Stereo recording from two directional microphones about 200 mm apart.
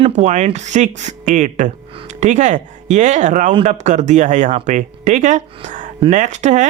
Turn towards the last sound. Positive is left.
turn(degrees=-35)  # may be behind; listen again after turning